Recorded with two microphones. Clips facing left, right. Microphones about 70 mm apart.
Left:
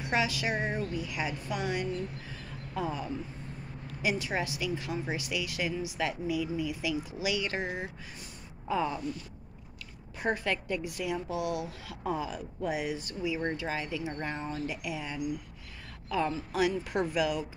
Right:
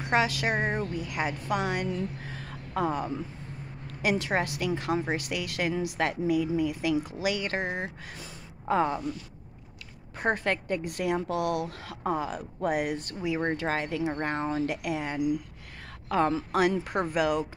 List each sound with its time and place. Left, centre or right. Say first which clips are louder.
0.0 s a woman's voice: right 4 dB; right
2.2 s a sound: right 3 dB; right
3.8 s a woman's voice: right 4 dB; right
10.1 s a woman's voice: right 3 dB; right
16.8 s a woman's voice: right 2 dB; right